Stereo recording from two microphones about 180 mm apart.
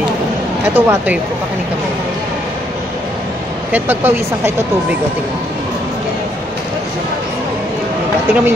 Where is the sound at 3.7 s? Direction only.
10° right (ahead or behind).